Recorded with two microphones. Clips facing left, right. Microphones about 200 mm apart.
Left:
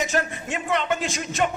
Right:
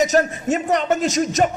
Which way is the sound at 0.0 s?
40° right (ahead or behind).